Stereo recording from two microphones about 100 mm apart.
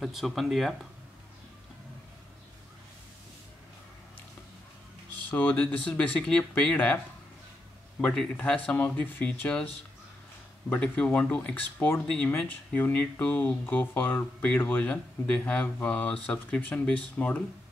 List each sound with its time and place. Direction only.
0.0 s speech: centre (ahead or behind)
5.4 s speech: 15° left (ahead or behind)
8.0 s speech: 10° left (ahead or behind)
10.7 s speech: 10° left (ahead or behind)